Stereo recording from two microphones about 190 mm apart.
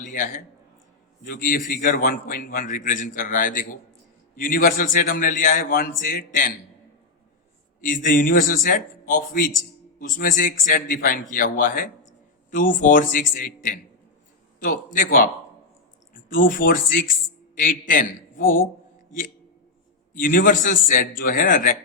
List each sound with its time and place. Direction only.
0.0 s a man's voice: 40° left (ahead or behind)
7.8 s a man's voice: 45° left (ahead or behind)
14.9 s a man's voice: 45° left (ahead or behind)
16.3 s a man's voice: 45° left (ahead or behind)
20.1 s a man's voice: 45° left (ahead or behind)